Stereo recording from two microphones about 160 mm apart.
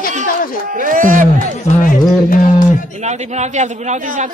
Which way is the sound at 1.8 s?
55° left (ahead or behind).